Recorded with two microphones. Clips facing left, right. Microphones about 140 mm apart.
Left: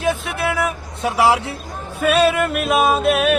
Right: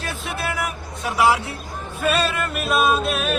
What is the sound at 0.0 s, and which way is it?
Vehicle, 55° left (ahead or behind).